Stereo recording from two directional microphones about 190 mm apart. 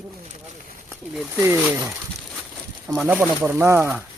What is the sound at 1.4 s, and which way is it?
Speech, 15° right (ahead or behind).